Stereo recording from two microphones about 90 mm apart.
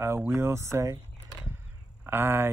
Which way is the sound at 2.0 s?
25° right (ahead or behind).